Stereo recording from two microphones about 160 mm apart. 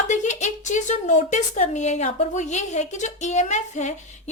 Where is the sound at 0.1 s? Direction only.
50° left (ahead or behind).